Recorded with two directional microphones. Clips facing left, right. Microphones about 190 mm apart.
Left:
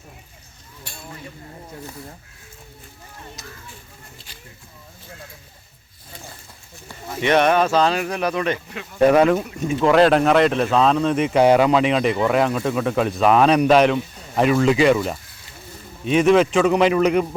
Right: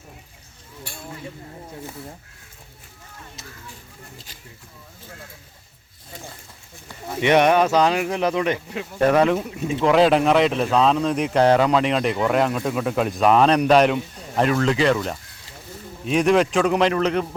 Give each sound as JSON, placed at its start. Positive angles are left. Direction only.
{"t": 7.2, "sound": "speech", "side_deg": -15}
{"t": 9.0, "sound": "speech", "side_deg": 10}